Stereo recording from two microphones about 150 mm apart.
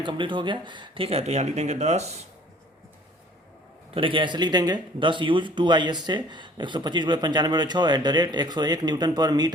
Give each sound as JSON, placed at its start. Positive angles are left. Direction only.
{"t": 0.0, "sound": "speech", "side_deg": -30}
{"t": 3.9, "sound": "speech", "side_deg": -35}